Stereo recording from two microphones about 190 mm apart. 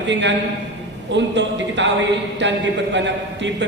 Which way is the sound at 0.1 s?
70° right (ahead or behind).